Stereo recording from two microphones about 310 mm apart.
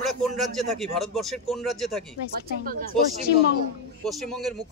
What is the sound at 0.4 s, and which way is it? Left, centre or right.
Speech, centre.